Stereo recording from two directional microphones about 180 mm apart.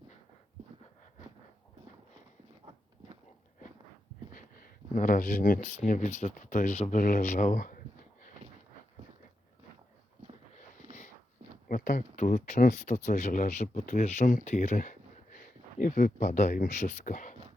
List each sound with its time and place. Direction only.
4.3 s speech: 50° left (ahead or behind)
11.7 s speech: 50° left (ahead or behind)